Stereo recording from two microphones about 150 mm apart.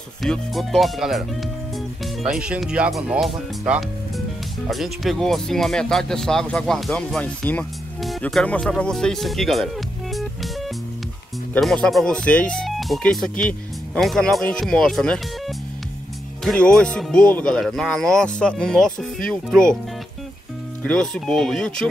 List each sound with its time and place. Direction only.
0.2 s speech: centre (ahead or behind)
2.2 s speech: 5° right (ahead or behind)
10.1 s music: centre (ahead or behind)
11.5 s speech: 5° left (ahead or behind)
20.8 s speech: 5° left (ahead or behind)